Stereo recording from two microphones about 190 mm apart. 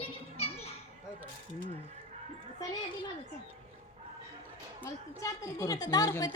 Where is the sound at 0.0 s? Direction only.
30° left (ahead or behind).